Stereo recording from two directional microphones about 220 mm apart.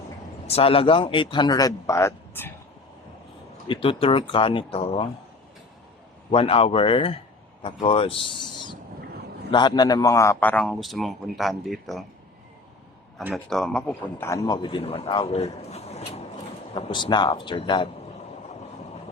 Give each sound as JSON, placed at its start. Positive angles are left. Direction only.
{"t": 0.4, "sound": "a man's voice", "side_deg": 25}
{"t": 3.7, "sound": "a man's voice", "side_deg": 25}
{"t": 6.3, "sound": "a man's voice", "side_deg": 25}
{"t": 13.1, "sound": "a man's voice", "side_deg": 0}